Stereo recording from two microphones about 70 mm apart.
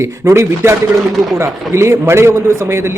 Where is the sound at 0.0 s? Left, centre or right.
Right.